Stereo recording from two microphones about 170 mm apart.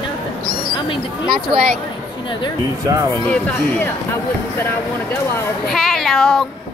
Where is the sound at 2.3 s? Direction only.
30° left (ahead or behind).